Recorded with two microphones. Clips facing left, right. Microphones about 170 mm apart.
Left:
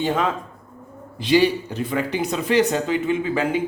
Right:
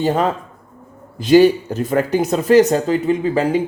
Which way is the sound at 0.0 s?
40° right (ahead or behind).